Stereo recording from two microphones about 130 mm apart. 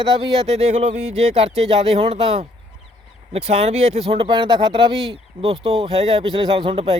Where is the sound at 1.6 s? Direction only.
45° right (ahead or behind).